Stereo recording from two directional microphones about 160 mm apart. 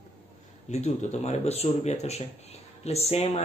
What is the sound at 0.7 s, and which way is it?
Speech, 45° left (ahead or behind).